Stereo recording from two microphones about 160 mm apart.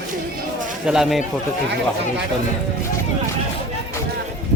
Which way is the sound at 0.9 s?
Centre (ahead or behind).